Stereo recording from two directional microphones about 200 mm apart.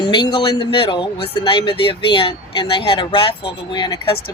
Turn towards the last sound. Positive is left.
turn(degrees=20)  # may be behind; listen again after turning